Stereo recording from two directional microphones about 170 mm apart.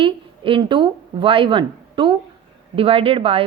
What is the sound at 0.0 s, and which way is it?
A woman's voice, 30° right (ahead or behind).